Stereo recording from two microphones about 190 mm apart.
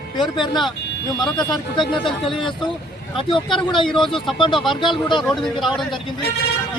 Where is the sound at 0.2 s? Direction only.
25° left (ahead or behind).